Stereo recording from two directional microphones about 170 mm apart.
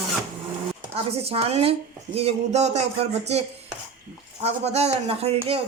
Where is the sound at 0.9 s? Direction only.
35° right (ahead or behind).